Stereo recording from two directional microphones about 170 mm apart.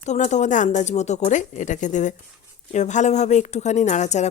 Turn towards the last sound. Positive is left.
turn(degrees=45)  # may be behind; listen again after turning